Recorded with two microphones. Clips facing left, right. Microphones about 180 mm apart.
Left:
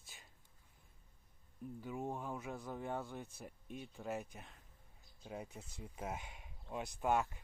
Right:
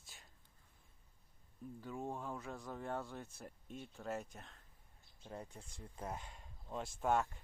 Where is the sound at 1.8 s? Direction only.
5° left (ahead or behind).